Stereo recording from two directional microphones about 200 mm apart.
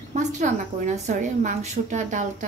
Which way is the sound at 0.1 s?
40° right (ahead or behind).